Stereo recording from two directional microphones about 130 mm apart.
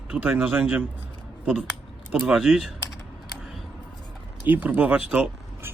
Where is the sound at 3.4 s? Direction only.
Centre (ahead or behind).